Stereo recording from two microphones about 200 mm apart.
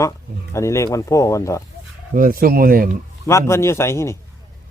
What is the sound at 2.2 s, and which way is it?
Speech, 45° right (ahead or behind).